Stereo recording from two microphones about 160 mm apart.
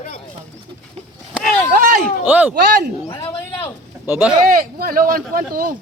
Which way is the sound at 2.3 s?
10° right (ahead or behind).